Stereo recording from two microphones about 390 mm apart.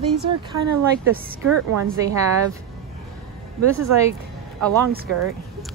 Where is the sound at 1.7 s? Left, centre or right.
Right.